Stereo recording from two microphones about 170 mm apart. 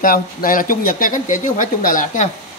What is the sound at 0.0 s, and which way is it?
Speech, 55° left (ahead or behind).